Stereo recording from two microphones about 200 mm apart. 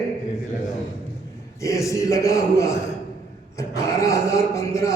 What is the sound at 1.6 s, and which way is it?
A man's voice, 15° left (ahead or behind).